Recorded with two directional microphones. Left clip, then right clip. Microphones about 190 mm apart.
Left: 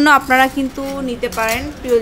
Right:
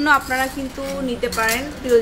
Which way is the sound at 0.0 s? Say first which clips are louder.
Left 6 dB; 35° left (ahead or behind).